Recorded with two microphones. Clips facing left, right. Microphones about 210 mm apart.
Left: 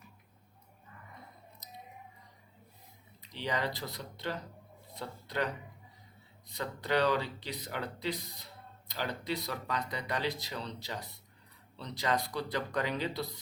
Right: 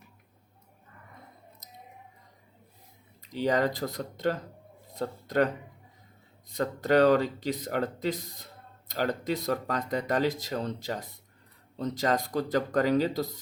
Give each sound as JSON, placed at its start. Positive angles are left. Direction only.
{"t": 3.2, "sound": "speech", "side_deg": -45}
{"t": 6.5, "sound": "speech", "side_deg": -45}